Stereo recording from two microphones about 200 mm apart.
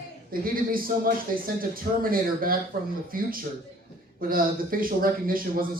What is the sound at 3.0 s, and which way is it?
A man's voice, 45° right (ahead or behind).